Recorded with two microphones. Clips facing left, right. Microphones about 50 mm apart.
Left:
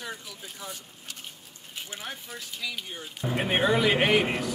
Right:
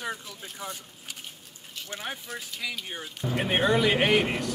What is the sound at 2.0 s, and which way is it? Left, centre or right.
Speech, right.